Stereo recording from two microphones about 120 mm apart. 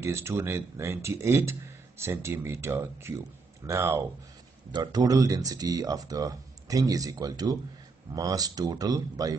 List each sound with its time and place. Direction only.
0.0 s speech: 20° right (ahead or behind)
4.7 s speech: 35° right (ahead or behind)